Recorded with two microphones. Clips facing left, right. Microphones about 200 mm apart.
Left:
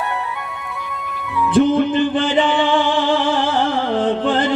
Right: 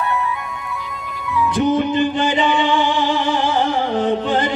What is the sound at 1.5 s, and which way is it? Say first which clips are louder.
Music: left 3 dB; 55° left (ahead or behind).